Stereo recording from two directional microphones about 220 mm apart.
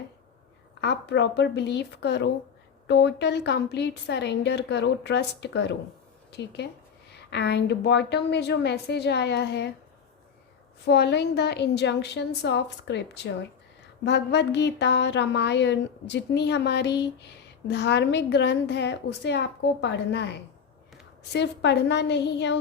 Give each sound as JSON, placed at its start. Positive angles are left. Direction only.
{"t": 0.8, "sound": "speech", "side_deg": 50}
{"t": 10.8, "sound": "speech", "side_deg": 50}